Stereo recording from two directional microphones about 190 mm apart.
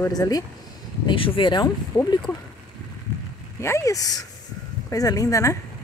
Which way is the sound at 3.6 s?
15° left (ahead or behind).